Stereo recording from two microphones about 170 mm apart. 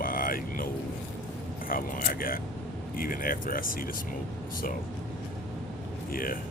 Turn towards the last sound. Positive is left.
turn(degrees=55)  # may be behind; listen again after turning